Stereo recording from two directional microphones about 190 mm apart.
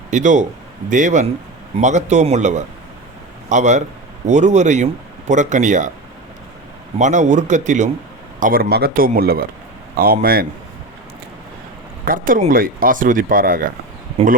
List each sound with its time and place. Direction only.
0.1 s a man's voice: 40° right (ahead or behind)
7.0 s a man's voice: 40° right (ahead or behind)
12.0 s speech: 45° right (ahead or behind)